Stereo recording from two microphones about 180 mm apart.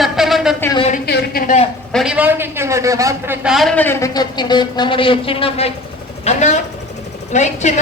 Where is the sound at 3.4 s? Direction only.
Centre (ahead or behind).